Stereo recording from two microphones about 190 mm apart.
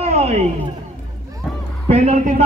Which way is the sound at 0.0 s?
35° right (ahead or behind).